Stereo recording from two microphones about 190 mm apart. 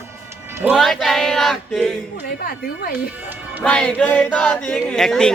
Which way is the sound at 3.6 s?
5° left (ahead or behind).